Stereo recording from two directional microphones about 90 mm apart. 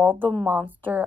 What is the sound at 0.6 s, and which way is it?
Speech, 20° right (ahead or behind).